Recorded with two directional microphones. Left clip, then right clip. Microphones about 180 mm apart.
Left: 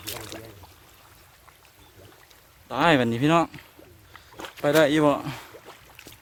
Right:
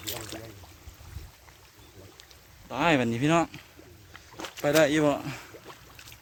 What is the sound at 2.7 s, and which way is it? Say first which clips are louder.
Speech: left 4 dB; 25° left (ahead or behind).